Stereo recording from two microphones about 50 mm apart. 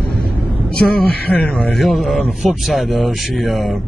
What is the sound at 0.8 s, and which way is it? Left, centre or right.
Speech, centre.